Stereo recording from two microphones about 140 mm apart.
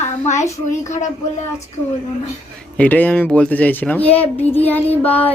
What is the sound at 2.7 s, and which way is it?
Speech, 10° left (ahead or behind).